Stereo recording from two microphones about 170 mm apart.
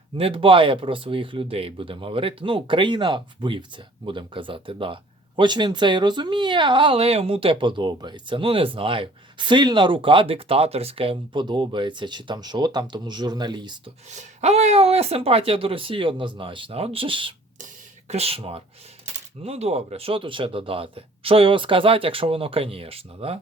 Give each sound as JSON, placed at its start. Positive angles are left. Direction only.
{"t": 0.2, "sound": "speech", "side_deg": -30}
{"t": 14.2, "sound": "speech", "side_deg": -40}